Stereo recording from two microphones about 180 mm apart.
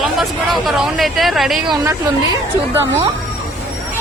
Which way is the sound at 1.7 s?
15° right (ahead or behind).